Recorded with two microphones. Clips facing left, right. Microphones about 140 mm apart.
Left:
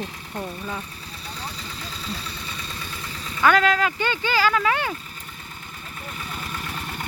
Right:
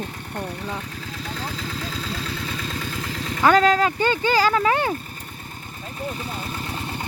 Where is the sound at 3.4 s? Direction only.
30° right (ahead or behind).